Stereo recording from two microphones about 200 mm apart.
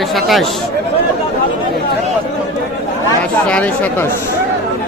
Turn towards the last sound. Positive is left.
turn(degrees=10)  # may be behind; listen again after turning